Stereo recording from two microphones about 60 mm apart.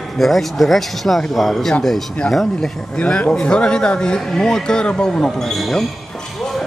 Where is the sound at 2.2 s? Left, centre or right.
Left; by 5.8 s centre.